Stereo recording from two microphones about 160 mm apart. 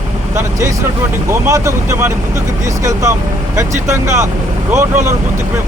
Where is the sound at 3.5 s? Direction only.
20° right (ahead or behind).